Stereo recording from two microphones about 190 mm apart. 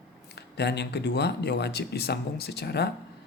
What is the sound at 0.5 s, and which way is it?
Speech, 65° left (ahead or behind).